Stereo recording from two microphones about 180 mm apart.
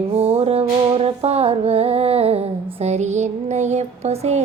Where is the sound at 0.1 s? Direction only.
35° right (ahead or behind).